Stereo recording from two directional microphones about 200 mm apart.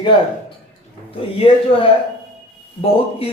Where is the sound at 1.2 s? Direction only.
25° left (ahead or behind).